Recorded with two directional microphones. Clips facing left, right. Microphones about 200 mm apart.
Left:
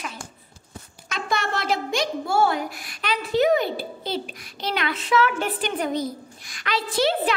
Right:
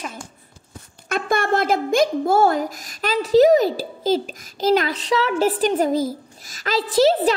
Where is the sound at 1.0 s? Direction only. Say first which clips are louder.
Right 6 dB; 55° right (ahead or behind); by 5.5 s 35° right (ahead or behind).